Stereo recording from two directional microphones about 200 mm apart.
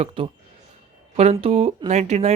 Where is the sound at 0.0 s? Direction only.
25° right (ahead or behind).